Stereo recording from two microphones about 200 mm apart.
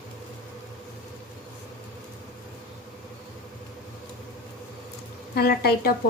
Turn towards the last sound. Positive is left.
turn(degrees=50)  # may be behind; listen again after turning